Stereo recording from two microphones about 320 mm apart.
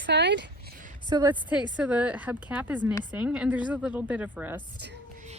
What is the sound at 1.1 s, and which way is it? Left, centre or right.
A woman's voice, centre.